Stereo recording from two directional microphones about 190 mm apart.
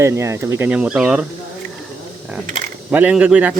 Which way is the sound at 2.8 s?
5° right (ahead or behind).